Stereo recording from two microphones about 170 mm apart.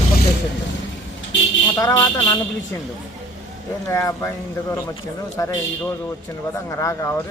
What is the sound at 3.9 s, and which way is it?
Speech, 15° left (ahead or behind).